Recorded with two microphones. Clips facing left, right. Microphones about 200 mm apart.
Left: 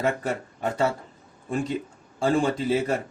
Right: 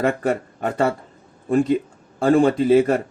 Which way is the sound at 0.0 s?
55° right (ahead or behind).